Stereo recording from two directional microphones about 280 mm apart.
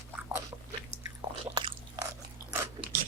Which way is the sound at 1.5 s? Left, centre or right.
Centre.